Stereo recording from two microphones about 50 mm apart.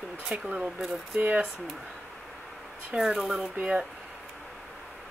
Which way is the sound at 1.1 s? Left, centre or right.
Right.